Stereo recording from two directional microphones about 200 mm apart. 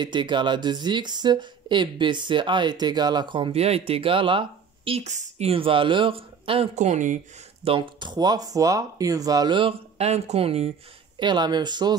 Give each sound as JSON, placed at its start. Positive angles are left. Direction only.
{"t": 0.0, "sound": "speech", "side_deg": -20}
{"t": 7.6, "sound": "speech", "side_deg": -25}